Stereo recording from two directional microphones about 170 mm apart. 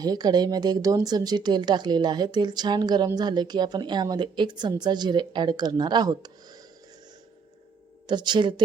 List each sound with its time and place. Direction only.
0.0 s a woman's voice: 25° right (ahead or behind)
8.0 s a woman's voice: 25° right (ahead or behind)